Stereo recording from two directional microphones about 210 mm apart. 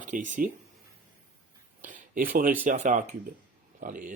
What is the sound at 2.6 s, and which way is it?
Speech, 35° right (ahead or behind).